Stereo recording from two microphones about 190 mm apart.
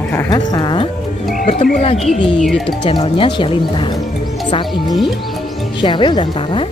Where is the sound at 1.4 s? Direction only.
40° left (ahead or behind).